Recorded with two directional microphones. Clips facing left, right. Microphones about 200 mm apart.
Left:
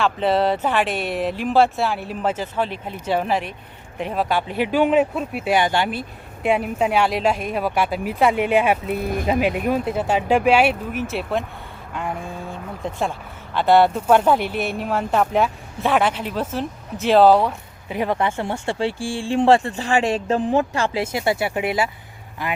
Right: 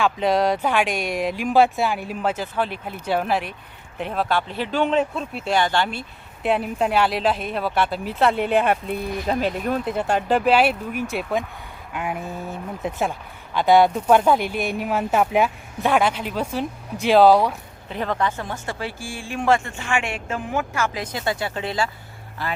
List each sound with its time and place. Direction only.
0.0 s speech: 10° right (ahead or behind)
1.5 s speech: centre (ahead or behind)
18.3 s speech: 25° left (ahead or behind)